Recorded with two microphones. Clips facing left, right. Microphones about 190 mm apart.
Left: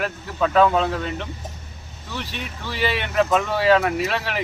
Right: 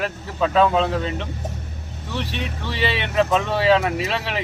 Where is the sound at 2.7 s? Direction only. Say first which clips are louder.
Even; 30° right (ahead or behind).